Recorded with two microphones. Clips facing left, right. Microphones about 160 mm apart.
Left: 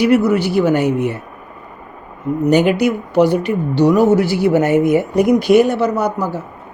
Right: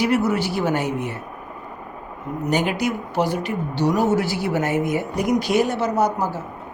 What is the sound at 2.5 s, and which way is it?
Speech, 65° left (ahead or behind).